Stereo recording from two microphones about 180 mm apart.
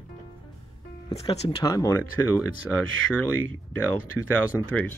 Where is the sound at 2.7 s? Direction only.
5° right (ahead or behind).